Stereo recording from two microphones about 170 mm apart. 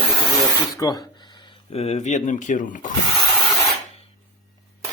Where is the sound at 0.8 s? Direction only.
20° left (ahead or behind); by 2.9 s 50° left (ahead or behind).